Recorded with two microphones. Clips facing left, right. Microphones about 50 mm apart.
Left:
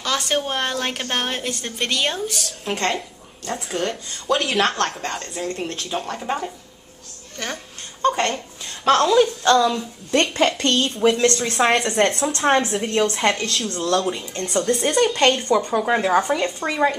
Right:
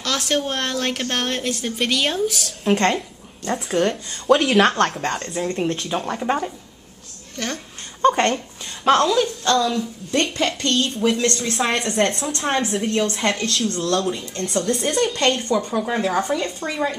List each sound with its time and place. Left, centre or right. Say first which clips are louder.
0.0 s a woman's voice: even; centre
5.6 s speech: right 5 dB; right
6.0 s speech: right 3 dB; centre
7.3 s a woman's voice: right 2 dB; centre
8.0 s speech: right 3 dB; centre
9.0 s a woman's voice: left 3 dB; centre
9.7 s speech: left 1 dB; left
10.4 s a woman's voice: left 2 dB; centre
14.3 s a woman's voice: even; centre
14.6 s a woman's voice: left 2 dB; centre
15.8 s speech: left 3 dB; centre
16.5 s a woman's voice: left 2 dB; centre